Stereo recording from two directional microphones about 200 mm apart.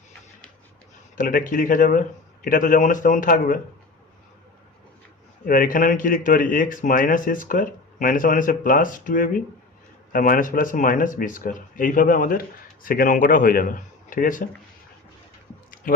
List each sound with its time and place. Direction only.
1.1 s speech: 40° left (ahead or behind)
5.5 s speech: 45° left (ahead or behind)